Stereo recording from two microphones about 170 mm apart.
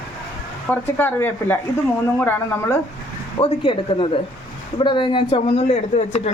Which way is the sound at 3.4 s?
30° left (ahead or behind).